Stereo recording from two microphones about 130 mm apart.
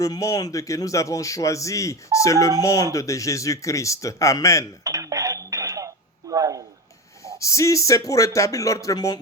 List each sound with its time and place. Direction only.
0.0 s a man's voice: 25° left (ahead or behind)
4.8 s throat clearing: 25° right (ahead or behind)
7.3 s a man's voice: 25° left (ahead or behind)